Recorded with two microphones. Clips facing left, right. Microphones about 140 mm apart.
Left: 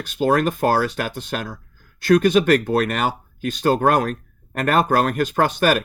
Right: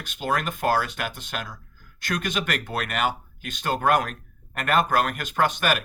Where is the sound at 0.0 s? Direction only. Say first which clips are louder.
Left 9 dB; 35° left (ahead or behind).